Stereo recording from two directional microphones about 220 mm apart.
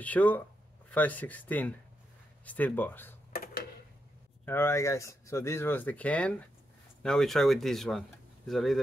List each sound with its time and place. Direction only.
0.0 s speech: 5° left (ahead or behind)
4.5 s speech: 10° left (ahead or behind)